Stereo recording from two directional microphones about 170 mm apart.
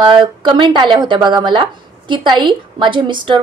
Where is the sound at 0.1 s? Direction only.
30° right (ahead or behind).